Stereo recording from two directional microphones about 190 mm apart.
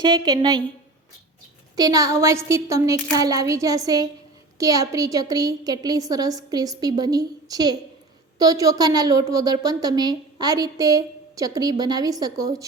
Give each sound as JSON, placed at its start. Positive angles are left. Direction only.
{"t": 0.0, "sound": "a woman's voice", "side_deg": -25}
{"t": 1.7, "sound": "a woman's voice", "side_deg": -20}